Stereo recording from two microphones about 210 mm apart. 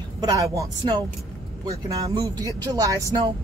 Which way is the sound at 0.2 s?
15° right (ahead or behind).